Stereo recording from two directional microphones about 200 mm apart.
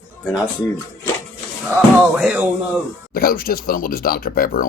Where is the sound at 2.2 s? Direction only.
10° right (ahead or behind).